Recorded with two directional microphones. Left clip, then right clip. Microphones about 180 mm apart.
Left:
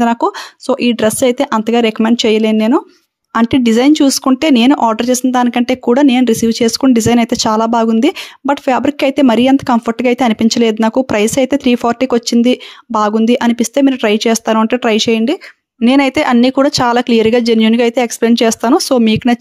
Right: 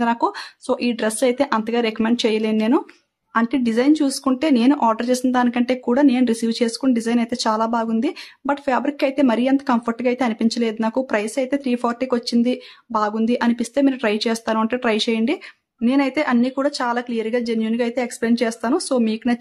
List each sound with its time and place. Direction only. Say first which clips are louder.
0.0 s speech: left 7 dB; 40° left (ahead or behind)
3.3 s speech: left 8 dB; 50° left (ahead or behind)
15.8 s speech: left 9 dB; 55° left (ahead or behind)